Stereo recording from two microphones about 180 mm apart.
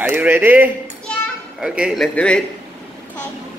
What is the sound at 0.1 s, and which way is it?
Speech, 10° right (ahead or behind).